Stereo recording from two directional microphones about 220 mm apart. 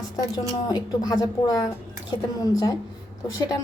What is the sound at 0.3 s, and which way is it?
A woman's voice, 20° left (ahead or behind).